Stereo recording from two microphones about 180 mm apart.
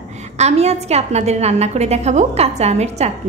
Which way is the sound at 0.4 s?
35° right (ahead or behind).